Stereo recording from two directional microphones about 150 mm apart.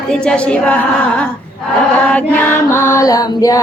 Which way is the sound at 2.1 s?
15° left (ahead or behind).